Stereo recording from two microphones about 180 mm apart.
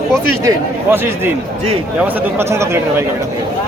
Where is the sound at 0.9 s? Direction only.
10° right (ahead or behind).